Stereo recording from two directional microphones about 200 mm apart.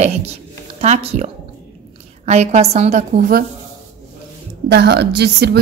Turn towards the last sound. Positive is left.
turn(degrees=-55)  # may be behind; listen again after turning